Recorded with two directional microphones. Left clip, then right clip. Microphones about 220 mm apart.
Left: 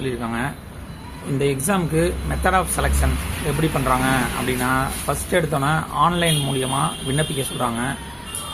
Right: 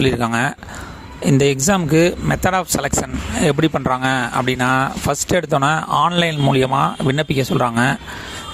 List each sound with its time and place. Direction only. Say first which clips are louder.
0.0 s speech: right 8 dB; 55° right (ahead or behind)